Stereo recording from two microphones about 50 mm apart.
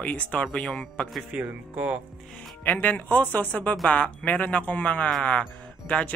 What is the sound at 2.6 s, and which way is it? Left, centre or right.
Speech, left.